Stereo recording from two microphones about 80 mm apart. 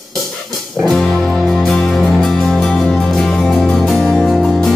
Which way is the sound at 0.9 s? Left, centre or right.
Centre.